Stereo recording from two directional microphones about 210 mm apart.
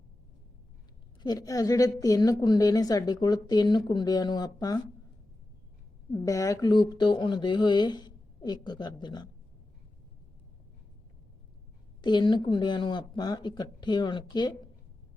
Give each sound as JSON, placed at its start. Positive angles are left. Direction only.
{"t": 1.2, "sound": "a woman's voice", "side_deg": 20}
{"t": 6.1, "sound": "speech", "side_deg": 15}
{"t": 12.0, "sound": "speech", "side_deg": 20}